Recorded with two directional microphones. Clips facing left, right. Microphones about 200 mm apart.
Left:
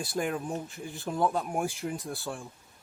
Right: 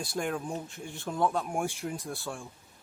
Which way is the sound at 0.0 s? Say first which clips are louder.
Left 1 dB; 5° left (ahead or behind).